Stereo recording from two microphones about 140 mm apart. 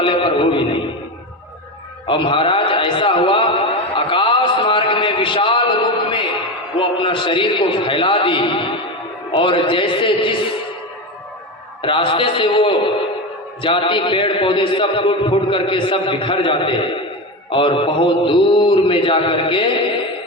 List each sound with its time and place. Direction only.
0.0 s music: 40° left (ahead or behind)
2.0 s a sound: 35° left (ahead or behind)
6.7 s a man's voice: 35° left (ahead or behind)
11.8 s a man's voice: 40° left (ahead or behind)